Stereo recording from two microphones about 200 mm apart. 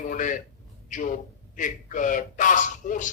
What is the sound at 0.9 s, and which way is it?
A man's voice, 40° left (ahead or behind).